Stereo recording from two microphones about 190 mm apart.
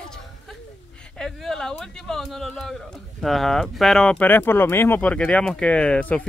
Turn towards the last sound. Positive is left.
turn(degrees=5)  # may be behind; listen again after turning